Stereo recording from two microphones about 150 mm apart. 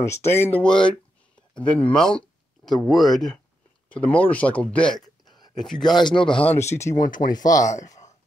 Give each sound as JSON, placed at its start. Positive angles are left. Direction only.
{"t": 0.0, "sound": "speech", "side_deg": 15}
{"t": 5.2, "sound": "a sound", "side_deg": 30}
{"t": 5.7, "sound": "speech", "side_deg": 5}
{"t": 5.9, "sound": "speech", "side_deg": 30}
{"t": 6.5, "sound": "speech", "side_deg": 15}
{"t": 7.0, "sound": "speech", "side_deg": 65}
{"t": 7.4, "sound": "speech", "side_deg": 25}
{"t": 7.7, "sound": "speech", "side_deg": 55}